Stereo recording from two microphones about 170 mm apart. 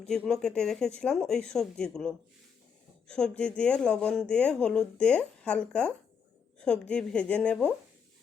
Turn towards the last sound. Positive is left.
turn(degrees=5)  # may be behind; listen again after turning